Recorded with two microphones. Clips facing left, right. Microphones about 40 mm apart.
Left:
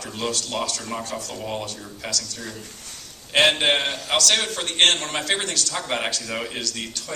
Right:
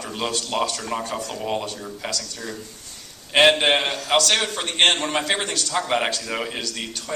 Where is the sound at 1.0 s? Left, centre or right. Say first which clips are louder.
Right 3 dB; right.